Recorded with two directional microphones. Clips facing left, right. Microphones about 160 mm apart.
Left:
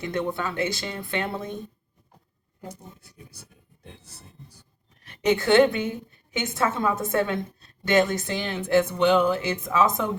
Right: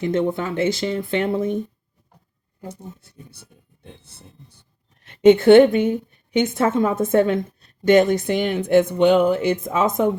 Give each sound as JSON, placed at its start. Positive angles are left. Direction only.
{"t": 0.0, "sound": "speech", "side_deg": -20}
{"t": 2.6, "sound": "speech", "side_deg": -30}
{"t": 4.0, "sound": "a sound", "side_deg": -30}
{"t": 5.0, "sound": "a woman's voice", "side_deg": -25}